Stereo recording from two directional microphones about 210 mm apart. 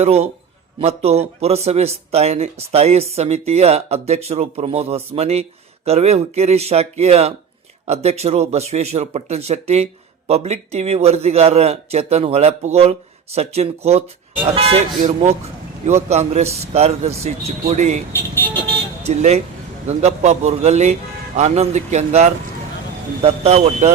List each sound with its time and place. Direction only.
0.0 s a man's voice: 30° right (ahead or behind)
19.0 s speech: 30° right (ahead or behind)